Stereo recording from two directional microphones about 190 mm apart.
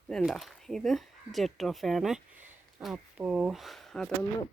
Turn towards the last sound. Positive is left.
turn(degrees=5)  # may be behind; listen again after turning